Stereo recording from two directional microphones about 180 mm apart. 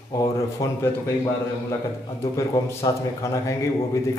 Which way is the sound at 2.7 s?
15° left (ahead or behind).